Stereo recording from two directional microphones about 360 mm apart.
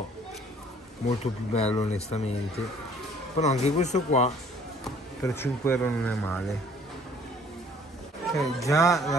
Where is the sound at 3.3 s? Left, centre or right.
Centre.